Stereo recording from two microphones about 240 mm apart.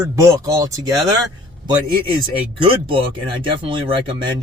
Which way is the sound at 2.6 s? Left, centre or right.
Right.